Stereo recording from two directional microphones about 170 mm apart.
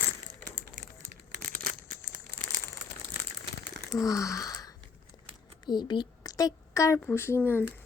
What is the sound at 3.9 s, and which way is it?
Gasp, 20° left (ahead or behind).